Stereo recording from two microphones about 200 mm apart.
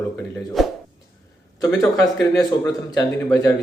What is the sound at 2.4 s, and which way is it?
A man's voice, 15° left (ahead or behind).